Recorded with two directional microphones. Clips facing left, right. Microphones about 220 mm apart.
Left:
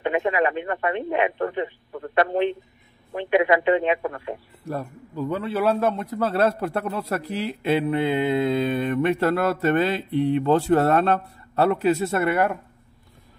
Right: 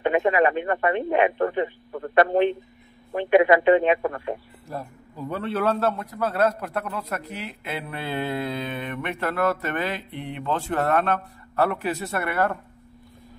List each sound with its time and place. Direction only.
0.0 s speech: 45° right (ahead or behind)
5.5 s a man's voice: 10° left (ahead or behind)
8.7 s mantra: 35° left (ahead or behind)
11.8 s a man's voice: 25° left (ahead or behind)